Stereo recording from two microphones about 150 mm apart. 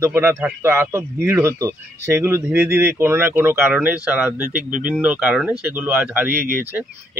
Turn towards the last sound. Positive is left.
turn(degrees=-15)  # may be behind; listen again after turning